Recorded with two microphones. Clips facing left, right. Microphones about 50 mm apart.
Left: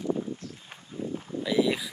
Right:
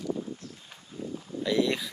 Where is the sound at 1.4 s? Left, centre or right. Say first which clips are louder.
Left 1 dB; centre.